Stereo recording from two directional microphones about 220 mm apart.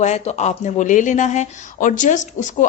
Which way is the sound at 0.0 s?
30° left (ahead or behind).